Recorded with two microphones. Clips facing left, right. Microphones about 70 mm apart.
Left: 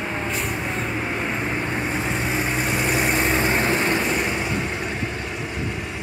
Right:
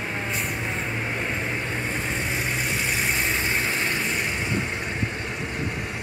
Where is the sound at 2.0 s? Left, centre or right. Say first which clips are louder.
Left 4 dB; centre.